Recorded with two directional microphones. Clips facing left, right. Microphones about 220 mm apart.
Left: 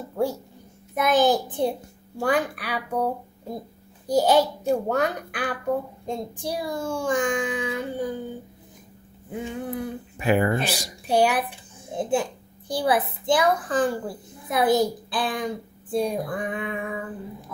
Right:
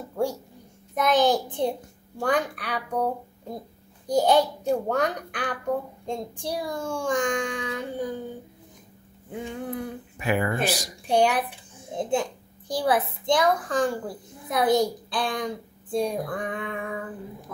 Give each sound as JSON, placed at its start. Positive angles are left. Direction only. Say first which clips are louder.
{"t": 0.1, "sound": "a sound", "louder": "left 1 dB", "side_deg": 5}
{"t": 0.9, "sound": "a child's voice", "louder": "left 1 dB", "side_deg": 5}
{"t": 9.3, "sound": "a child's voice", "louder": "left 2 dB", "side_deg": 5}
{"t": 10.1, "sound": "speech", "louder": "left 4 dB", "side_deg": 30}
{"t": 11.1, "sound": "a child's voice", "louder": "left 1 dB", "side_deg": 5}